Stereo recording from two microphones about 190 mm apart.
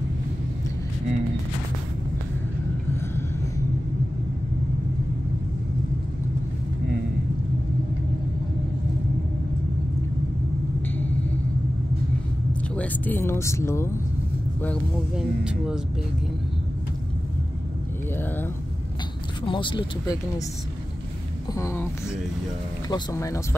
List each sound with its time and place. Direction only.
12.7 s speech: 10° left (ahead or behind)
15.1 s speech: 5° right (ahead or behind)
19.4 s speech: 25° left (ahead or behind)
21.5 s speech: 15° left (ahead or behind)
22.8 s speech: 20° left (ahead or behind)